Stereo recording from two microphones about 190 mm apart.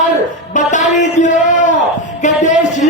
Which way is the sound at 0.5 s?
40° left (ahead or behind).